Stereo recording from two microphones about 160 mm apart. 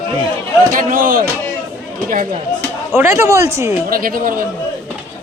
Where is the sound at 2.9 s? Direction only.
15° right (ahead or behind).